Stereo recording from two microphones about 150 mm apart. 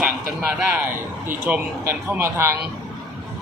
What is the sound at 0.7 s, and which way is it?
Speech, 15° right (ahead or behind).